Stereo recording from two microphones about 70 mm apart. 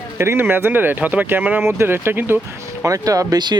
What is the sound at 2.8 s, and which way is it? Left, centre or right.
Speech, right.